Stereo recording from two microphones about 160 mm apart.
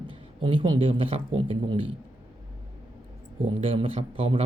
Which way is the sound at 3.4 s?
35° right (ahead or behind).